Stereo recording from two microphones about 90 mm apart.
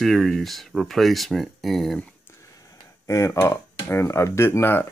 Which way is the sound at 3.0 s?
30° left (ahead or behind).